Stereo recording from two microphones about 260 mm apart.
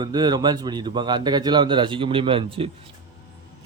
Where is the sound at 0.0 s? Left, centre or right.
Centre.